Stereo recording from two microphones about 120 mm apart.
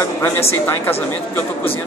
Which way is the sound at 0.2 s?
20° left (ahead or behind).